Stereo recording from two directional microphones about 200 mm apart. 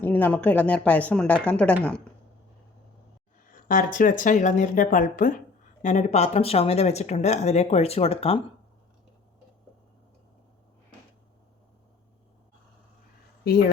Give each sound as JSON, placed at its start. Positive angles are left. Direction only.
{"t": 0.0, "sound": "speech", "side_deg": 10}
{"t": 3.5, "sound": "speech", "side_deg": 40}